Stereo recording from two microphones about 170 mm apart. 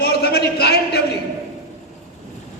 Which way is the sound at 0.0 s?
70° left (ahead or behind).